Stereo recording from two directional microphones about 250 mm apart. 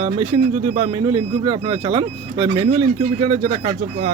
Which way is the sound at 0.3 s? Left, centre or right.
Centre.